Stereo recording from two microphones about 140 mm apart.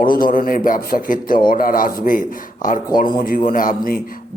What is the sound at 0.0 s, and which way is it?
A man's voice, 90° left.